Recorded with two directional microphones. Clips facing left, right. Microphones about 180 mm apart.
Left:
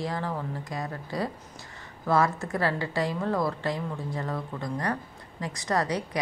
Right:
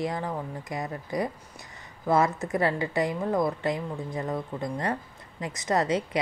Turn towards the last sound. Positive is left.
turn(degrees=-20)  # may be behind; listen again after turning